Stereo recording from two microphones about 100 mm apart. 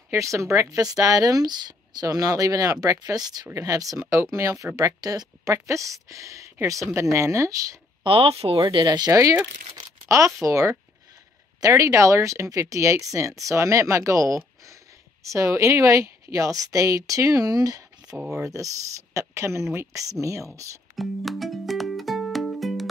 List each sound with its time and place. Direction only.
0.1 s speech: 30° right (ahead or behind)
8.0 s speech: 70° right (ahead or behind)
8.6 s speech: 45° right (ahead or behind)
18.1 s speech: 5° right (ahead or behind)
18.4 s speech: 30° right (ahead or behind)
20.9 s music: centre (ahead or behind)